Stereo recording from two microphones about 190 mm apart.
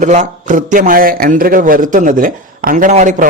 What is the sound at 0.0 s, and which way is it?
A man's voice, 40° right (ahead or behind).